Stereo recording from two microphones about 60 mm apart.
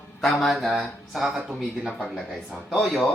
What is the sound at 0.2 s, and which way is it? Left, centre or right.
Speech, centre.